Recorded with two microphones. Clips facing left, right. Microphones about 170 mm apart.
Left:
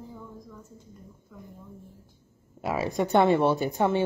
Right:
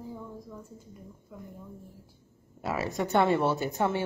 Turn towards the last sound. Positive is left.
turn(degrees=15)  # may be behind; listen again after turning